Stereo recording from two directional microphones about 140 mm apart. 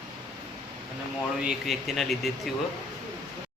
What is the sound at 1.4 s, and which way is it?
Speech, centre (ahead or behind).